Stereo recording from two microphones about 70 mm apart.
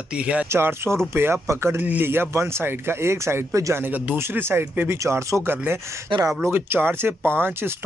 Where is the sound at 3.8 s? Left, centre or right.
Right.